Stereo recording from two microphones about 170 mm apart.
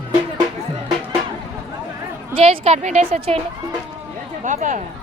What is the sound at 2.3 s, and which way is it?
Speech, 35° right (ahead or behind).